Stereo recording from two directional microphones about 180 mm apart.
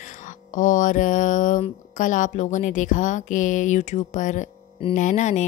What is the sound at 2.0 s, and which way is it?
A woman's voice, 45° left (ahead or behind).